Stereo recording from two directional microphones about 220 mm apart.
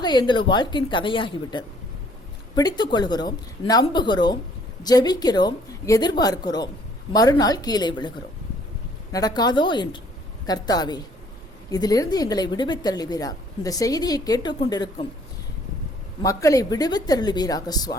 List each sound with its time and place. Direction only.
0.0 s a woman's voice: 20° left (ahead or behind)
9.1 s a woman's voice: 15° left (ahead or behind)
16.2 s a woman's voice: 15° left (ahead or behind)